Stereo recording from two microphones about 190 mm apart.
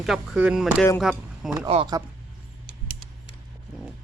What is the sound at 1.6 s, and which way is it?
Speech, 25° right (ahead or behind).